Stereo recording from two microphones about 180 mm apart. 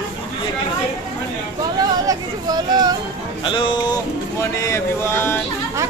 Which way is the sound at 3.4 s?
25° left (ahead or behind).